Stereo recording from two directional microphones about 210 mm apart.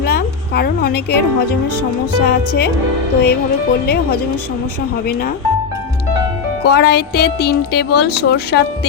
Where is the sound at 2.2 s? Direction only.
50° left (ahead or behind).